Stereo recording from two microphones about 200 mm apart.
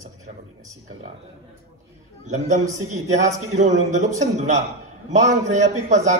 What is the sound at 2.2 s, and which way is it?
A man's voice, 35° right (ahead or behind).